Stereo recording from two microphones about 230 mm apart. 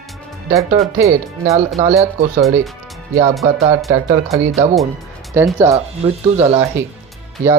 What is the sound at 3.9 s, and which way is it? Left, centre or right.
Speech, centre.